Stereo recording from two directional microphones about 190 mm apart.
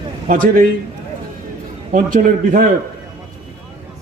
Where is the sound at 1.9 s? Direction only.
45° right (ahead or behind).